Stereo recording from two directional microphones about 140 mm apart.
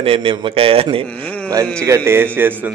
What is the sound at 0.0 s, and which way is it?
A man's voice, 40° right (ahead or behind).